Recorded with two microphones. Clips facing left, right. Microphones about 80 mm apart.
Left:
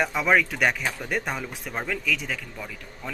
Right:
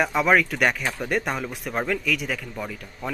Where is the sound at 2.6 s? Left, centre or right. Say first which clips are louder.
Right 5 dB; centre.